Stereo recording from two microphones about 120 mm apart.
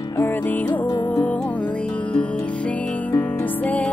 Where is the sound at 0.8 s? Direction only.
35° left (ahead or behind).